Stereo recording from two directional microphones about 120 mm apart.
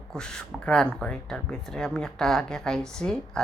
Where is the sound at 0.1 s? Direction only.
5° left (ahead or behind).